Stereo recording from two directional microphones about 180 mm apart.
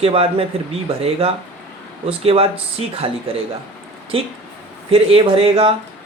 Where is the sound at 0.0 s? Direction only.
30° right (ahead or behind).